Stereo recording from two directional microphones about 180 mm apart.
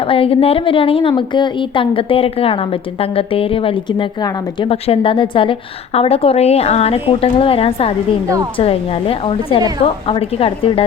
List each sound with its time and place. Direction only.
0.1 s a woman's voice: 30° left (ahead or behind)